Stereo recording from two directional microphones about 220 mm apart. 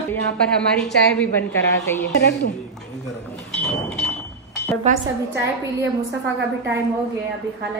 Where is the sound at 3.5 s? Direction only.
5° left (ahead or behind).